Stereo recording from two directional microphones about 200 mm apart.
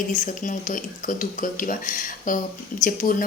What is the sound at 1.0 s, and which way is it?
Speech, 40° left (ahead or behind).